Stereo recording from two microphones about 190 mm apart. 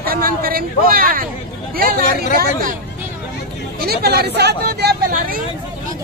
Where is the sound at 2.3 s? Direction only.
50° right (ahead or behind).